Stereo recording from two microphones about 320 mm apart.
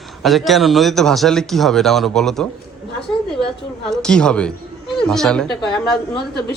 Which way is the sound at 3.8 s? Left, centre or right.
Centre.